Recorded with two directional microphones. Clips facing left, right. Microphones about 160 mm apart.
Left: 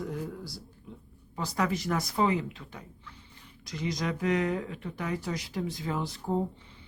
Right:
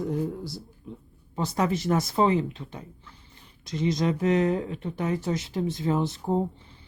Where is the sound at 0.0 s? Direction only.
25° right (ahead or behind).